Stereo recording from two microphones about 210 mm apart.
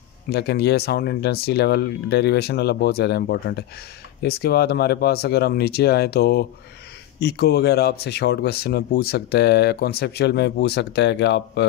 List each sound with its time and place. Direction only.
0.3 s speech: 50° left (ahead or behind)